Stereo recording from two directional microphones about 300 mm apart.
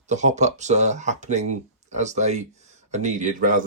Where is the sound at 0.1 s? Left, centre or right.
Right.